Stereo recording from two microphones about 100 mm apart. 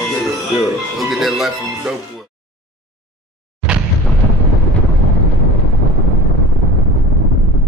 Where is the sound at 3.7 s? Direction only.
10° right (ahead or behind).